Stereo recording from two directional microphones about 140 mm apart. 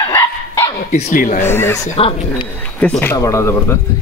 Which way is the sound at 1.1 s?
70° left (ahead or behind).